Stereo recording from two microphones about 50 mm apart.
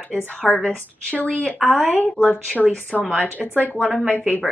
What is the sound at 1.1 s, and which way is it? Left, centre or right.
Speech, left.